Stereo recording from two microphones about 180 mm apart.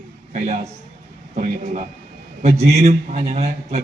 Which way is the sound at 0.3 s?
40° right (ahead or behind).